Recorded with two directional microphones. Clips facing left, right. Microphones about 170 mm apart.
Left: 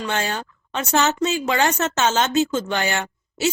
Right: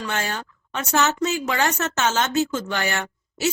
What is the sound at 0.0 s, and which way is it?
Speech, 25° left (ahead or behind).